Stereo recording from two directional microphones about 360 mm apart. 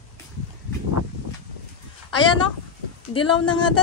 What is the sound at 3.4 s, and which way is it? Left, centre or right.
Speech, left.